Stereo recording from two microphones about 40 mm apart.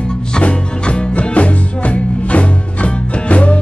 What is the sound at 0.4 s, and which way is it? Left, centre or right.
Music, left.